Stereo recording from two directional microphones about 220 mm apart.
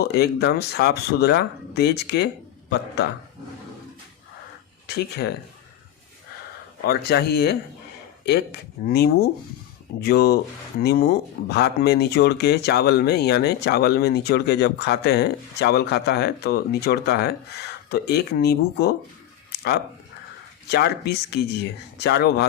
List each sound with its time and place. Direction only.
0.0 s speech: 45° left (ahead or behind)
6.8 s speech: 45° left (ahead or behind)
8.9 s speech: 45° left (ahead or behind)
19.5 s a sound: 45° left (ahead or behind)
20.7 s speech: 45° left (ahead or behind)